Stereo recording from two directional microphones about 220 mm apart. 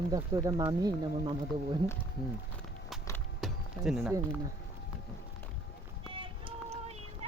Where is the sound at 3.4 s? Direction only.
Centre (ahead or behind).